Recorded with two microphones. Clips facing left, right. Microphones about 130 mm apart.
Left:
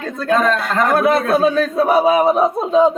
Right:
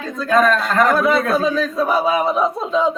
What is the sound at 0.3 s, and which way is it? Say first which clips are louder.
Speech: right 1 dB; 25° left (ahead or behind).